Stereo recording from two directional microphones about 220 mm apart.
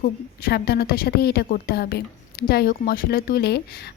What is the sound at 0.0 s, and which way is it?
A woman's voice, 45° left (ahead or behind).